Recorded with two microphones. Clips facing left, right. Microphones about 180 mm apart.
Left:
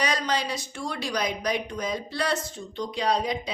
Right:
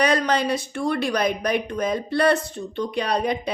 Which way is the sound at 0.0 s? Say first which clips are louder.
Right 7 dB; 55° right (ahead or behind).